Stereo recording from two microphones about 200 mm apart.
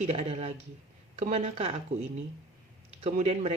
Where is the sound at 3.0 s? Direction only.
30° right (ahead or behind).